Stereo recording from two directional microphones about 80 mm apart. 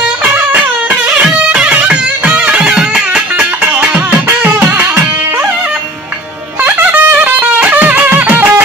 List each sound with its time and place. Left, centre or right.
0.5 s music: centre
4.3 s music: right
6.6 s music: centre